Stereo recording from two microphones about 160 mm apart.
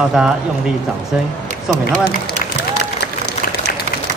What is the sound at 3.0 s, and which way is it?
Applause, 90° left.